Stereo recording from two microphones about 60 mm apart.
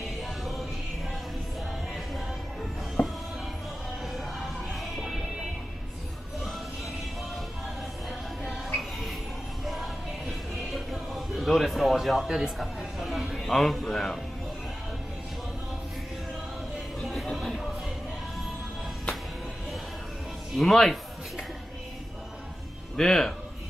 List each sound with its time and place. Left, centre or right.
0.4 s music: centre
3.0 s music: left
4.0 s music: centre
9.7 s music: centre
17.0 s music: centre
20.5 s speech: centre
22.9 s a man's voice: centre